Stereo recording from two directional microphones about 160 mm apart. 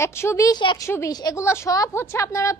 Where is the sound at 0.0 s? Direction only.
15° left (ahead or behind).